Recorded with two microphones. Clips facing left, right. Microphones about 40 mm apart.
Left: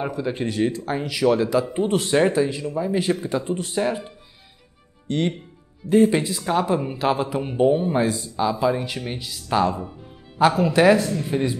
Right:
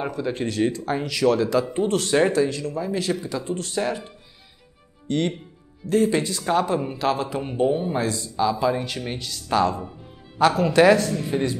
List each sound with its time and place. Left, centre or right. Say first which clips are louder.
0.0 s speech: left 1 dB; centre
3.0 s speech: left 3 dB; left; by 11.5 s centre